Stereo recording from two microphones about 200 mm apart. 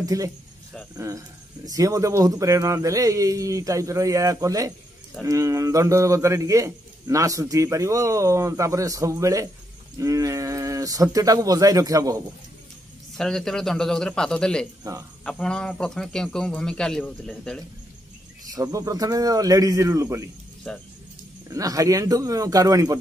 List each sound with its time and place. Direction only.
0.0 s a man's voice: 15° right (ahead or behind)
13.2 s a man's voice: centre (ahead or behind)
14.8 s speech: 15° right (ahead or behind)
15.2 s a man's voice: 5° left (ahead or behind)
18.5 s a man's voice: 15° right (ahead or behind)
20.7 s a man's voice: 5° left (ahead or behind)
21.5 s a man's voice: 15° right (ahead or behind)